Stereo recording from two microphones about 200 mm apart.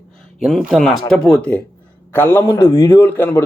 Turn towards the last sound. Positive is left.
turn(degrees=10)  # may be behind; listen again after turning